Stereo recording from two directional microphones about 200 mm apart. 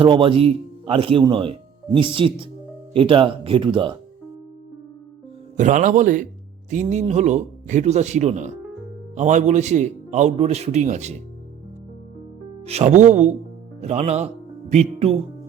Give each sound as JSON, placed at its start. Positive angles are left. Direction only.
{"t": 0.0, "sound": "speech", "side_deg": -25}
{"t": 5.5, "sound": "a man's voice", "side_deg": -40}
{"t": 12.6, "sound": "a man's voice", "side_deg": -35}